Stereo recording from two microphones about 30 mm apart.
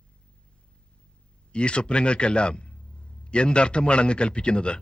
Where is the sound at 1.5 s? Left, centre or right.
Left.